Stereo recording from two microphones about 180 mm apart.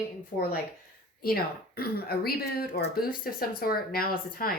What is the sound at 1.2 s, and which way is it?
A woman's voice, 55° left (ahead or behind).